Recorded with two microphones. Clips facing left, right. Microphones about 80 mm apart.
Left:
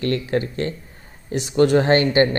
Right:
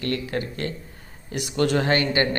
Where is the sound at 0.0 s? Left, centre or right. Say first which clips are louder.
Left 5 dB; left.